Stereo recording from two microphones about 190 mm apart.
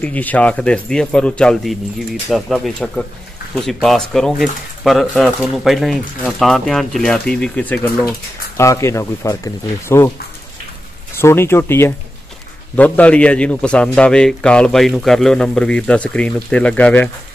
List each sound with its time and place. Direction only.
0.0 s speech: 10° left (ahead or behind)
11.1 s speech: 15° left (ahead or behind)